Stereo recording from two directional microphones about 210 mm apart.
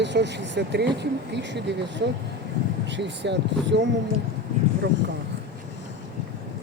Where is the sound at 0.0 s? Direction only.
55° right (ahead or behind).